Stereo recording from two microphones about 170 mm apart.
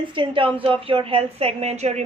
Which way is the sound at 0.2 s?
30° right (ahead or behind).